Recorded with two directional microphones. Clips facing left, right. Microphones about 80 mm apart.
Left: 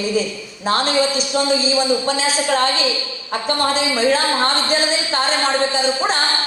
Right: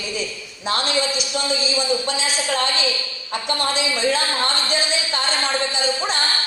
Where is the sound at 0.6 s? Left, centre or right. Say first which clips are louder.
Left 5 dB; left.